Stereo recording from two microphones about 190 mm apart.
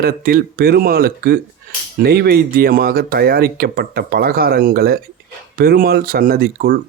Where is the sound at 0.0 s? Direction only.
50° right (ahead or behind).